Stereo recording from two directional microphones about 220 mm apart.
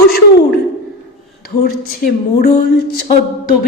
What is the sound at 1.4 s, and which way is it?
Speech, 45° left (ahead or behind).